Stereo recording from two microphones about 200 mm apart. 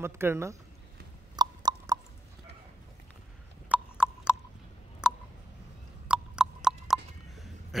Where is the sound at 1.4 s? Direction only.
20° right (ahead or behind).